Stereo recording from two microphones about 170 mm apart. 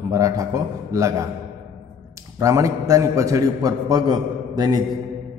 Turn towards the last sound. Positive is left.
turn(degrees=-25)  # may be behind; listen again after turning